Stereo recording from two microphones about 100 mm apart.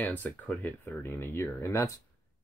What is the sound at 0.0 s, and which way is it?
Speech, 15° left (ahead or behind).